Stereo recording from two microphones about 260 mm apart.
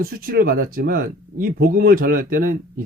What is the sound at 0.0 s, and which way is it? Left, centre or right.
Speech, right.